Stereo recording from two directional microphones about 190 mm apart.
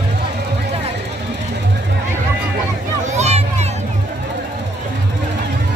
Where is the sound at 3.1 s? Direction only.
35° right (ahead or behind).